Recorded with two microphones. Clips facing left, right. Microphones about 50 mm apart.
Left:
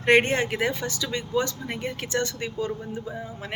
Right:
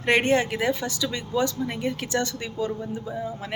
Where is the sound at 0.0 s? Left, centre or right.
Left.